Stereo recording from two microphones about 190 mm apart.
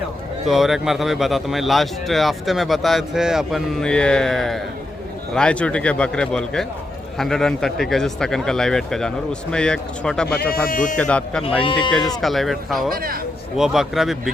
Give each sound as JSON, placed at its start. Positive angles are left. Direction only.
{"t": 0.4, "sound": "speech", "side_deg": 0}
{"t": 10.7, "sound": "speech", "side_deg": 45}
{"t": 10.9, "sound": "speech", "side_deg": 5}
{"t": 11.4, "sound": "speech", "side_deg": 30}
{"t": 12.2, "sound": "speech", "side_deg": 0}
{"t": 12.9, "sound": "a man's voice", "side_deg": -50}
{"t": 13.6, "sound": "speech", "side_deg": 0}